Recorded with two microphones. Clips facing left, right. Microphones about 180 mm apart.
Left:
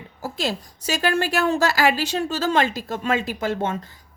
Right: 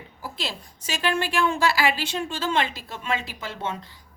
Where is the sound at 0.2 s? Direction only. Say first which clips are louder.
Left 7 dB; 45° left (ahead or behind).